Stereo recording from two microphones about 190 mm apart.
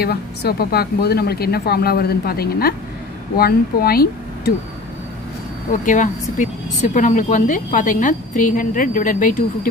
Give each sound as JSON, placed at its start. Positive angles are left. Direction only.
{"t": 0.0, "sound": "speech", "side_deg": 55}
{"t": 5.7, "sound": "speech", "side_deg": 40}